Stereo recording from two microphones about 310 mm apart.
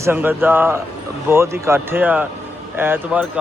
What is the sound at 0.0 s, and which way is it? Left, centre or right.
Speech, centre.